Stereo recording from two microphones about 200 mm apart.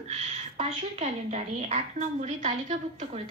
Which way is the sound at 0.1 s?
30° right (ahead or behind).